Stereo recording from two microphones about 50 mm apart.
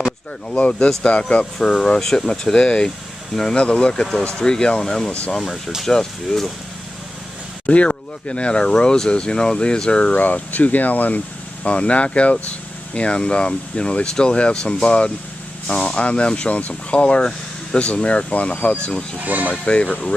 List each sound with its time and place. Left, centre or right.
0.5 s speech: left
7.6 s speech: left
10.1 s speech: left
19.2 s speech: right
19.6 s speech: left